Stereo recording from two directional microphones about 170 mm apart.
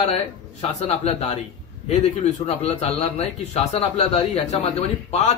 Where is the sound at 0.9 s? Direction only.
35° left (ahead or behind).